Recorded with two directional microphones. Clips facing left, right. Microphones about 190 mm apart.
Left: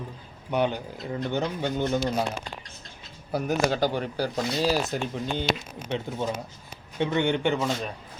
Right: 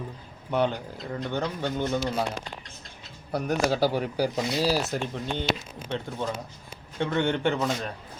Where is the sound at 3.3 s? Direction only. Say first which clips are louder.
Even; centre (ahead or behind).